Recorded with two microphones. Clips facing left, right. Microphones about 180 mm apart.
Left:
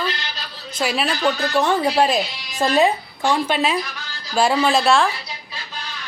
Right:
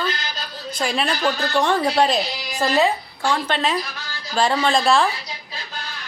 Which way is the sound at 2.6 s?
15° left (ahead or behind).